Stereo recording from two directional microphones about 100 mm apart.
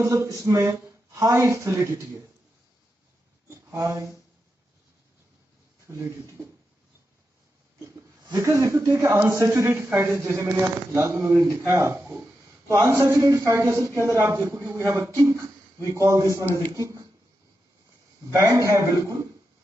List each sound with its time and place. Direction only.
0.0 s a man's voice: 30° right (ahead or behind)
3.4 s a sound: 30° right (ahead or behind)
5.9 s speech: 30° right (ahead or behind)
8.3 s speech: 30° right (ahead or behind)
18.3 s a man's voice: 30° right (ahead or behind)